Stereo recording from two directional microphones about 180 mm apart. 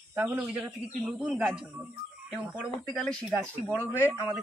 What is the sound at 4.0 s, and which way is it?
Speech, 10° right (ahead or behind).